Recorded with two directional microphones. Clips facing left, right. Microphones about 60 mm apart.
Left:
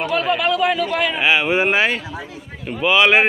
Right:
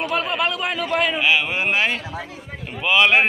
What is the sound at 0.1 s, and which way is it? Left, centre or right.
A man's voice, centre.